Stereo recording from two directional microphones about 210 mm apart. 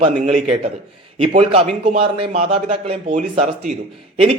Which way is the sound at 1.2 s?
25° right (ahead or behind).